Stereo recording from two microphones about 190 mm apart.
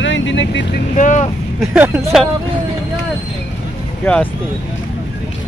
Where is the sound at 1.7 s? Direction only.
10° right (ahead or behind).